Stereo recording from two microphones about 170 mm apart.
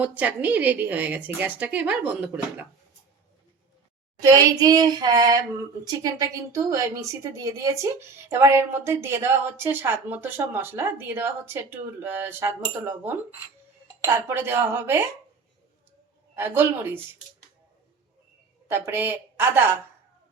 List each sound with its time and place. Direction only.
0.0 s a woman's voice: 10° right (ahead or behind)
4.2 s a woman's voice: 20° right (ahead or behind)
16.3 s a woman's voice: 15° right (ahead or behind)
18.7 s a woman's voice: 15° right (ahead or behind)